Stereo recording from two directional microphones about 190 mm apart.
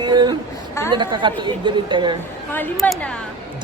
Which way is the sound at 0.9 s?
25° right (ahead or behind).